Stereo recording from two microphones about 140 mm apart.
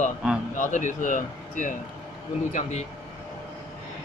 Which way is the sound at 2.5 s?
55° left (ahead or behind).